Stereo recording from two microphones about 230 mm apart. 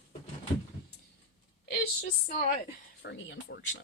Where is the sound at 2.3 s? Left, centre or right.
Left.